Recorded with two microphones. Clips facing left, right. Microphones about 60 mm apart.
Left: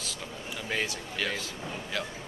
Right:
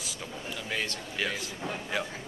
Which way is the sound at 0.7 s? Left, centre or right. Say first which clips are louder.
Left 2 dB; centre.